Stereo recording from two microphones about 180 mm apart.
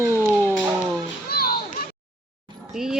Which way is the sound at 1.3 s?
60° left (ahead or behind).